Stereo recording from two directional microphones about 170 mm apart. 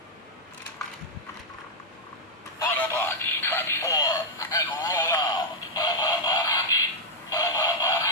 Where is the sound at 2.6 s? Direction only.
15° left (ahead or behind).